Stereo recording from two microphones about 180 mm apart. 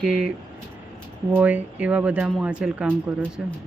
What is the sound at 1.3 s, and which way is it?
Speech, 10° right (ahead or behind).